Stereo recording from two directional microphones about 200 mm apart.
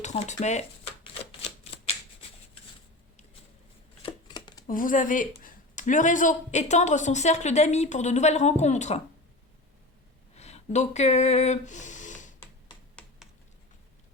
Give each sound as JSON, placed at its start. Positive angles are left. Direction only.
{"t": 0.0, "sound": "speech", "side_deg": 35}
{"t": 1.2, "sound": "typewriter", "side_deg": 30}
{"t": 4.0, "sound": "shuffling cards", "side_deg": 20}
{"t": 4.6, "sound": "speech", "side_deg": 40}
{"t": 10.3, "sound": "a sound", "side_deg": 35}
{"t": 13.0, "sound": "computer keyboard", "side_deg": 5}